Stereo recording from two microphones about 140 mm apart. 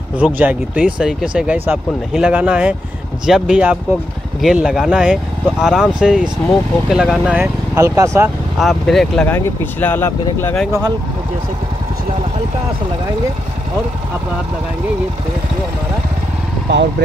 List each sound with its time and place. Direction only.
0.2 s speech: 10° right (ahead or behind)
7.3 s speech: 20° right (ahead or behind)
8.5 s speech: centre (ahead or behind)
9.3 s speech: 15° left (ahead or behind)
10.5 s speech: centre (ahead or behind)